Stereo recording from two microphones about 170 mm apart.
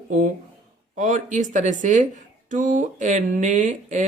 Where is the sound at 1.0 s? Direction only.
45° right (ahead or behind).